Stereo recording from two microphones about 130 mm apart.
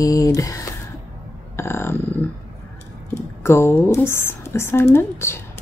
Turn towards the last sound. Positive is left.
turn(degrees=20)  # may be behind; listen again after turning